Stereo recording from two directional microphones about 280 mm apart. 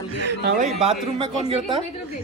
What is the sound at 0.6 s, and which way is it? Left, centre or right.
Speech, right.